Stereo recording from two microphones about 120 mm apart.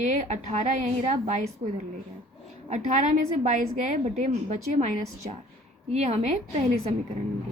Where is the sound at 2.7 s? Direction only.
75° right (ahead or behind).